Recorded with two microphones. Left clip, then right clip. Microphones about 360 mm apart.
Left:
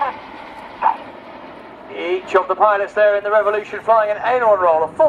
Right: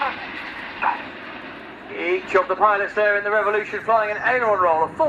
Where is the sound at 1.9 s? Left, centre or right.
Left.